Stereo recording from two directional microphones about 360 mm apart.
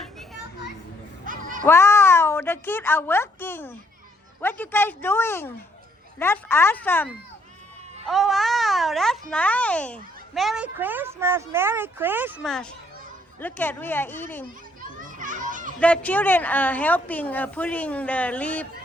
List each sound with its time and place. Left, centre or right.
1.2 s children playing: right
1.6 s a woman's voice: centre
14.8 s children playing: right
15.8 s a child's voice: centre